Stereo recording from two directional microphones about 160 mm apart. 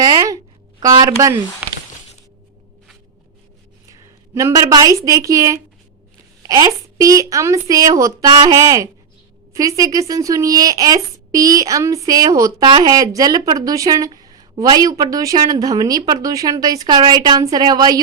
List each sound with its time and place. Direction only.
0.0 s a sound: 25° right (ahead or behind)
0.8 s a woman's voice: 25° right (ahead or behind)
4.4 s a woman's voice: 20° right (ahead or behind)